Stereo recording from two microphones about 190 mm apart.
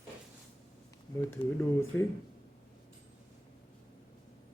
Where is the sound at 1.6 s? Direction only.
15° left (ahead or behind).